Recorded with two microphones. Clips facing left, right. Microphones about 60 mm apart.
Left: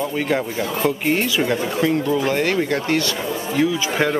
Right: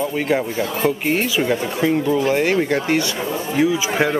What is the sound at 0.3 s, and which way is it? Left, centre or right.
Speech, centre.